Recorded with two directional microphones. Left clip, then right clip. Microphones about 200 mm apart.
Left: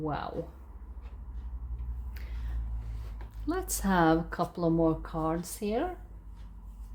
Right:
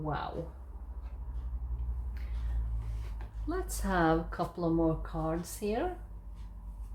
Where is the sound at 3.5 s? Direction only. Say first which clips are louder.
Left 3 dB; 55° left (ahead or behind).